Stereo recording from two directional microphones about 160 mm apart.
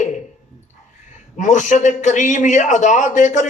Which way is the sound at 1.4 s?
50° left (ahead or behind).